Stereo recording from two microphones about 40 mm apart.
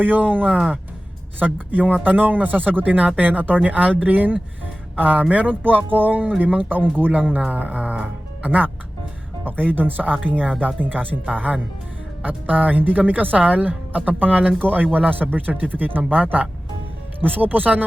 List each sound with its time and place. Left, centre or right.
0.0 s speech: right